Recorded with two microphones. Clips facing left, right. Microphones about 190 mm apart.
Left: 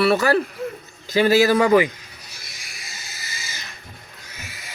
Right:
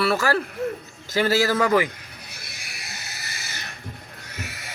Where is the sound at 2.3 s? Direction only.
60° right (ahead or behind).